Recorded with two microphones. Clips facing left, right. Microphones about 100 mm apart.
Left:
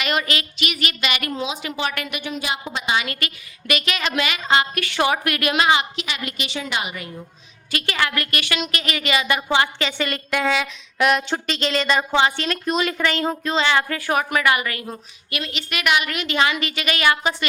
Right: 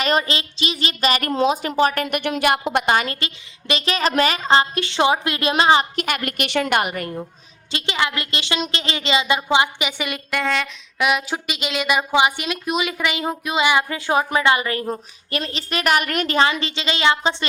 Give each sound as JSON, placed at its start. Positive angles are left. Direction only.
{"t": 0.0, "sound": "a woman's voice", "side_deg": -35}
{"t": 2.3, "sound": "a woman's voice", "side_deg": -70}
{"t": 3.1, "sound": "a woman's voice", "side_deg": -25}
{"t": 6.0, "sound": "a woman's voice", "side_deg": -55}
{"t": 7.7, "sound": "a woman's voice", "side_deg": -25}
{"t": 10.3, "sound": "a sound", "side_deg": 5}